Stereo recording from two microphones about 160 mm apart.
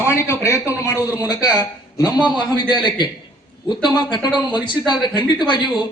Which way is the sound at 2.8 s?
25° left (ahead or behind).